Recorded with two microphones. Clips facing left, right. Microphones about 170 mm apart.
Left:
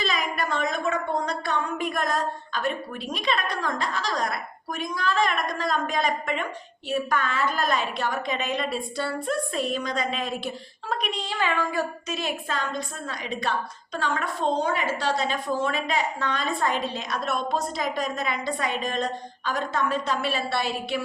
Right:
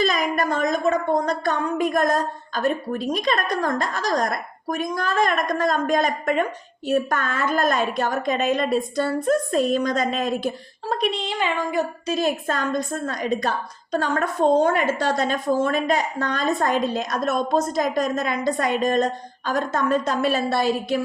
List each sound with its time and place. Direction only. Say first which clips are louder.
0.0 s a woman's voice: right 6 dB; 45° right (ahead or behind)
11.0 s a woman's voice: right 5 dB; 25° right (ahead or behind)
12.0 s a woman's voice: right 7 dB; 40° right (ahead or behind)